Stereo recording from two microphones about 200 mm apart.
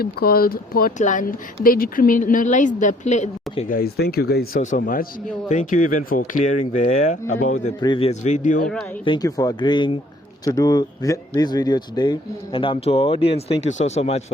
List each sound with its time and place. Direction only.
0.0 s speech: 50° left (ahead or behind); by 3.8 s 35° left (ahead or behind)
3.8 s speech: 50° left (ahead or behind)
7.8 s speech: 25° left (ahead or behind)
9.0 s speech: 20° left (ahead or behind)